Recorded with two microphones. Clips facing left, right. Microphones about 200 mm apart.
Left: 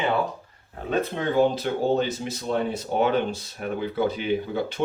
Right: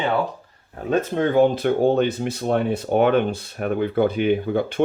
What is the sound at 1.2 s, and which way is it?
Speech, 55° right (ahead or behind).